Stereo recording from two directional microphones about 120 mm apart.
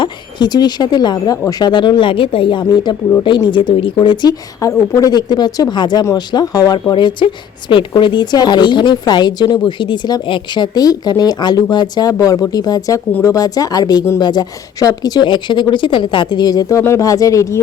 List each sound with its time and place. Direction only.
0.0 s a woman's voice: 35° left (ahead or behind)
2.9 s speech: 25° left (ahead or behind)
3.2 s a woman's voice: 40° left (ahead or behind)